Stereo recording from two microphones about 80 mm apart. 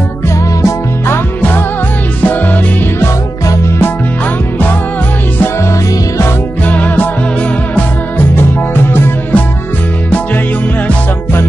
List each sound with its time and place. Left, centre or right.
0.6 s music: left
6.7 s music: left
8.9 s music: left